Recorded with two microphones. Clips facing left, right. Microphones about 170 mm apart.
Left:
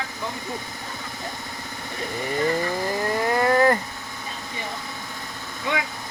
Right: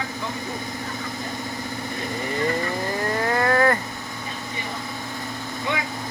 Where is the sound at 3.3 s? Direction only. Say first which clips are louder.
Left 2 dB; 15° left (ahead or behind).